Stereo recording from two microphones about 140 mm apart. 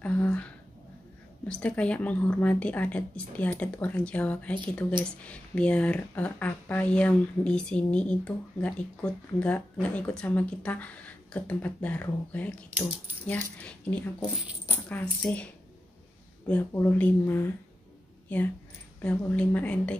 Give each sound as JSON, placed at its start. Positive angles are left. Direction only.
{"t": 0.0, "sound": "speech", "side_deg": 10}
{"t": 1.5, "sound": "speech", "side_deg": 10}
{"t": 16.4, "sound": "speech", "side_deg": 10}